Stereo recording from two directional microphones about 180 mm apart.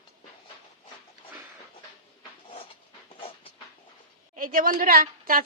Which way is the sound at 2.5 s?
30° left (ahead or behind).